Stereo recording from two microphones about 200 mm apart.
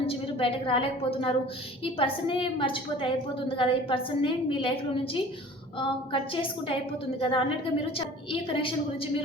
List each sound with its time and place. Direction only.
0.0 s a woman's voice: 30° left (ahead or behind)
5.8 s a woman's voice: 25° left (ahead or behind)